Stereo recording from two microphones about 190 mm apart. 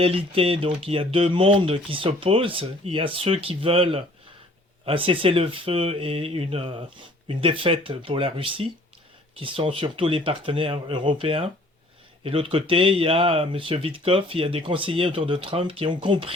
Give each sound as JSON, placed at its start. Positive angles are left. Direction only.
{"t": 0.0, "sound": "speech", "side_deg": -30}